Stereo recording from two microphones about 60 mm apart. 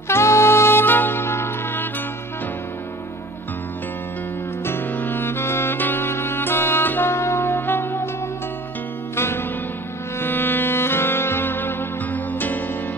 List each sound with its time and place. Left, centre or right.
0.1 s saxophone: left
4.6 s saxophone: left
9.1 s music: left